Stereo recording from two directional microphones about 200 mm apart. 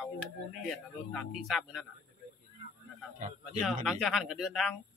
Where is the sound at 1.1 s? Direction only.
Centre (ahead or behind).